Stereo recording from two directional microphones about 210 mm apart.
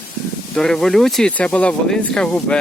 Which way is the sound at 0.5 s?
Centre (ahead or behind).